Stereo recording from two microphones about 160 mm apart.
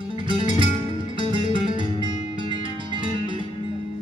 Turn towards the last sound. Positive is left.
turn(degrees=-30)  # may be behind; listen again after turning